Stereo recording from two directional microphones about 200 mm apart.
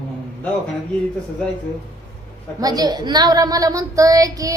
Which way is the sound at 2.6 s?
20° right (ahead or behind).